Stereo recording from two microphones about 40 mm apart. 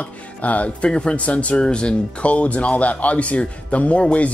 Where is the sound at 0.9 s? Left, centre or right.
Left.